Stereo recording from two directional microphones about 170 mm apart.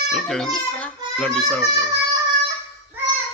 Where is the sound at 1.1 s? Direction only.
5° left (ahead or behind).